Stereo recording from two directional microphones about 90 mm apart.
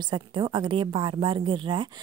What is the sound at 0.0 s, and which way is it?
A woman's voice, 60° right (ahead or behind).